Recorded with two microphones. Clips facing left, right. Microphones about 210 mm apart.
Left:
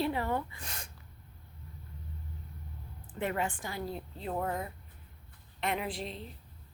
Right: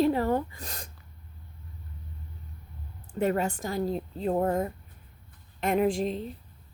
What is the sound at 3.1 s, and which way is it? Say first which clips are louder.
A woman's voice: right 7 dB; 40° right (ahead or behind).